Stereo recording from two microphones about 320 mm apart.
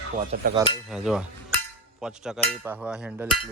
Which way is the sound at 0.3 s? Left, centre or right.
Right.